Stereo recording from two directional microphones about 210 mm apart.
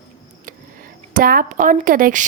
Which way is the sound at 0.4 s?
40° right (ahead or behind).